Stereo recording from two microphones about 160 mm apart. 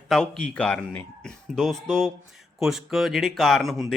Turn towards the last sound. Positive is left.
turn(degrees=0)  # may be behind; listen again after turning